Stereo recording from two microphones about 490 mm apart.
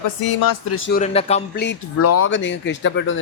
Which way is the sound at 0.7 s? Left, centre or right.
Centre.